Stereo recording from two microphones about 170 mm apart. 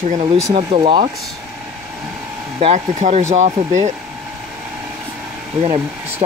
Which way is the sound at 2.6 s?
40° right (ahead or behind).